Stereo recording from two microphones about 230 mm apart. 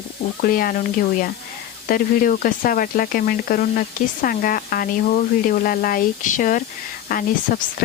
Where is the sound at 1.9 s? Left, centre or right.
Left.